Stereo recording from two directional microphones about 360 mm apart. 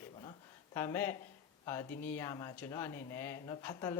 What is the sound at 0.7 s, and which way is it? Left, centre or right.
Speech, centre.